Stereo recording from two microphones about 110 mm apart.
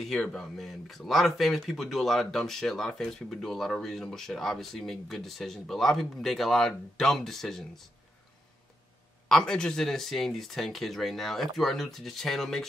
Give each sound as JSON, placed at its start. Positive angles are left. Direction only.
{"t": 0.0, "sound": "speech", "side_deg": 5}
{"t": 9.3, "sound": "speech", "side_deg": 5}